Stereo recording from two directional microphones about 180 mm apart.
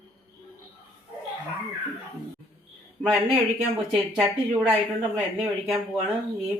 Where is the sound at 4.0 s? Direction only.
10° right (ahead or behind).